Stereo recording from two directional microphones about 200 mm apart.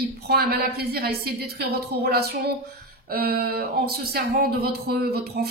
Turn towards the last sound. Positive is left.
turn(degrees=-55)  # may be behind; listen again after turning